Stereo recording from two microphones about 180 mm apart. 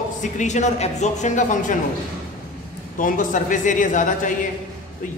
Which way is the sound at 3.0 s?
45° left (ahead or behind).